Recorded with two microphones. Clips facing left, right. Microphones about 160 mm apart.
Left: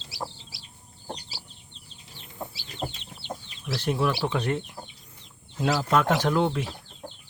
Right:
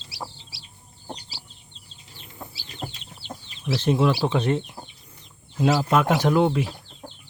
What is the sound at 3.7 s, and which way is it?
Speech, 20° right (ahead or behind).